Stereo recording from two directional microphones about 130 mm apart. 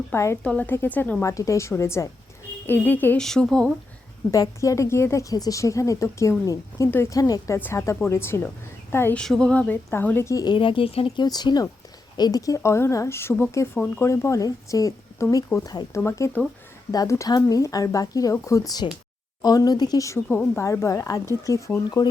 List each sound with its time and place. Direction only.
0.1 s a woman's voice: 20° left (ahead or behind)
1.2 s a woman's voice: 25° left (ahead or behind)
3.2 s speech: 5° left (ahead or behind)
4.3 s a woman's voice: 25° left (ahead or behind)
9.2 s speech: 5° left (ahead or behind); by 11.3 s 45° left (ahead or behind)
11.3 s speech: 30° left (ahead or behind)
18.8 s speech: 40° left (ahead or behind)
20.2 s a woman's voice: 5° left (ahead or behind)
20.6 s speech: 25° left (ahead or behind)